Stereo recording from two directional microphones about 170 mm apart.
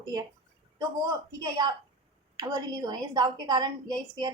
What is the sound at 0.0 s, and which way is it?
A woman's voice, 25° right (ahead or behind).